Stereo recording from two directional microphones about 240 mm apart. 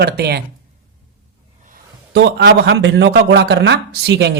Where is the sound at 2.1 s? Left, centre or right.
Right.